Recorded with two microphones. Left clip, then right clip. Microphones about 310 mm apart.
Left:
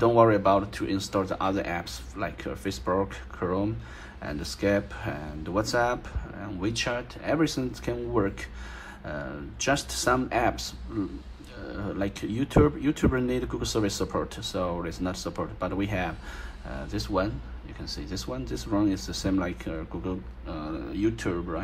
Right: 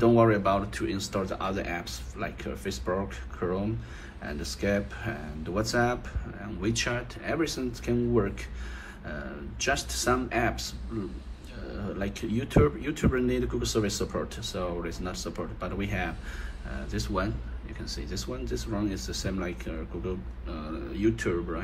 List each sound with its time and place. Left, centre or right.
0.0 s speech: left
11.7 s speech: left